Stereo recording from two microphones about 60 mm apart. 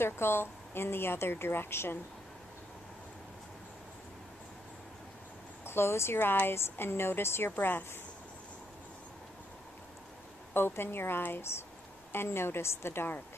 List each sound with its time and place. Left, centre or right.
0.0 s a woman's voice: left
5.7 s speech: left
7.5 s a woman's voice: left
10.5 s a woman's voice: left